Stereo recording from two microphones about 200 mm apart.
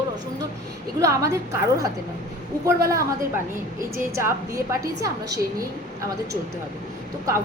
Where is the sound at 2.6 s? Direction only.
15° right (ahead or behind).